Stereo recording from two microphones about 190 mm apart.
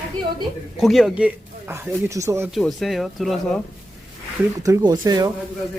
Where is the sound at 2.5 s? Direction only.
Centre (ahead or behind).